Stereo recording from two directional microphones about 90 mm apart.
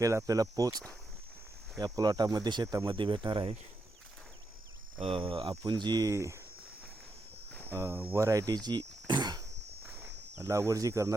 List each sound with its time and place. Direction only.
0.0 s speech: 35° right (ahead or behind)
1.8 s speech: 45° right (ahead or behind)
2.9 s speech: 65° right (ahead or behind)
4.9 s speech: 85° right
5.6 s speech: 55° right (ahead or behind)
6.1 s speech: 35° right (ahead or behind)
7.7 s speech: 25° right (ahead or behind)
8.2 s speech: 35° right (ahead or behind)
9.0 s a sound: 55° right (ahead or behind)
9.9 s speech: 25° right (ahead or behind)